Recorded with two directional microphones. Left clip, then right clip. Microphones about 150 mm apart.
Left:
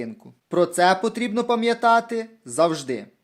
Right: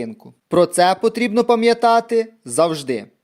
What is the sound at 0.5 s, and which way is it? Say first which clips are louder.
Speech: right 4 dB; 40° right (ahead or behind).